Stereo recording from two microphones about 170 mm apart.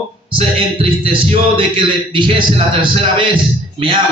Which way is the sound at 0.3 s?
35° right (ahead or behind).